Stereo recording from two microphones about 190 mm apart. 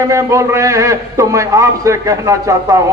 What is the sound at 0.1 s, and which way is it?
A man's voice, 15° right (ahead or behind).